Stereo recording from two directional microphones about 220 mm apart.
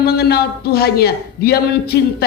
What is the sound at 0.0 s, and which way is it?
A woman's voice, 45° left (ahead or behind).